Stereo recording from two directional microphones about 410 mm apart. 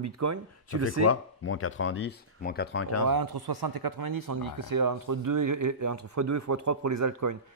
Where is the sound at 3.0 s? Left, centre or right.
Right.